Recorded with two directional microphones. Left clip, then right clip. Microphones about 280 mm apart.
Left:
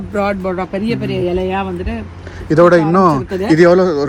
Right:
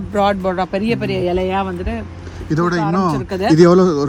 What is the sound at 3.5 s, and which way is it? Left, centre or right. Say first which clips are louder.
Speech: left 2 dB; right.